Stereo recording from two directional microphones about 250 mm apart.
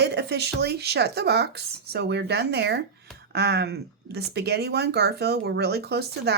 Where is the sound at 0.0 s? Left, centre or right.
Right.